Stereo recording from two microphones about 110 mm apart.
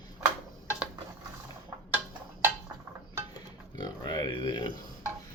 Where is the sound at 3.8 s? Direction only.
40° left (ahead or behind).